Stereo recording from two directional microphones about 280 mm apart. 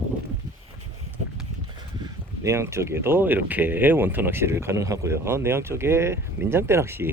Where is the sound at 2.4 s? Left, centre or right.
Centre.